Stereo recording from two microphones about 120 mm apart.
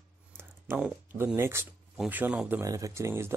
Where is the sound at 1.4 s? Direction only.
20° right (ahead or behind).